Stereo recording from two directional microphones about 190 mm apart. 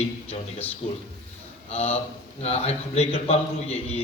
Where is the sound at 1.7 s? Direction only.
35° left (ahead or behind).